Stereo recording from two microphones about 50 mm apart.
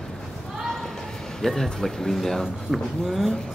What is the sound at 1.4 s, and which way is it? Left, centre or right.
Speech, centre.